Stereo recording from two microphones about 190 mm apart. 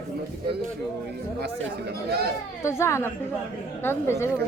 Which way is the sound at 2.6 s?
15° left (ahead or behind).